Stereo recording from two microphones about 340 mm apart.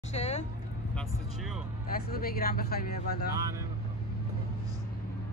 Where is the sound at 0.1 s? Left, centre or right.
Centre.